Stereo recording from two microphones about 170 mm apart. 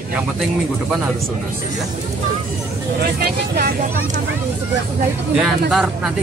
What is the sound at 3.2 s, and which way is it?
Speech, 65° right (ahead or behind).